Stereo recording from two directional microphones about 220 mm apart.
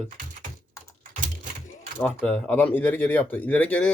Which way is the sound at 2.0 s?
5° left (ahead or behind).